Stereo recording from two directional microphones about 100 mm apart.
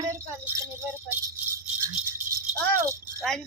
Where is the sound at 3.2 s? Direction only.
Centre (ahead or behind).